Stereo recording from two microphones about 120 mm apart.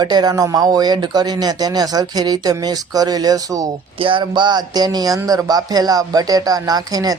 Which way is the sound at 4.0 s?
45° right (ahead or behind).